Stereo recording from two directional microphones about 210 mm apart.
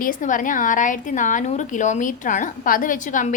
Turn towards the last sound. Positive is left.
turn(degrees=40)  # may be behind; listen again after turning